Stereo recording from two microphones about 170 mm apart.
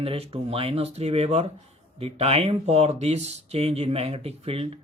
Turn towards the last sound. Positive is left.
turn(degrees=-35)  # may be behind; listen again after turning